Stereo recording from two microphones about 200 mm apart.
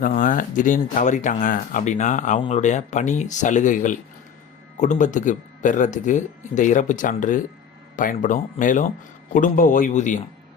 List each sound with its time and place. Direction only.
0.0 s speech: 40° left (ahead or behind)